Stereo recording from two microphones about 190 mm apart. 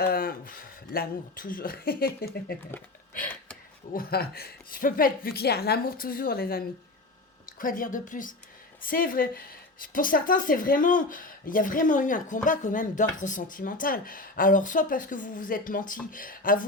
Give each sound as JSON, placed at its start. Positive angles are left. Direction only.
{"t": 0.0, "sound": "speech", "side_deg": 50}
{"t": 3.9, "sound": "speech", "side_deg": 50}
{"t": 7.6, "sound": "speech", "side_deg": 45}